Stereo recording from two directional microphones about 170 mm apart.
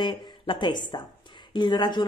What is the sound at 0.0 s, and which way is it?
A woman's voice, 25° left (ahead or behind).